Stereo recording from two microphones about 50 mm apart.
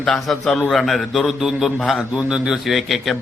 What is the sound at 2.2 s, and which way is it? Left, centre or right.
Speech, centre.